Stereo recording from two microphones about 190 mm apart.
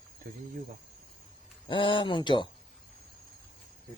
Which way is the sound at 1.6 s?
25° left (ahead or behind).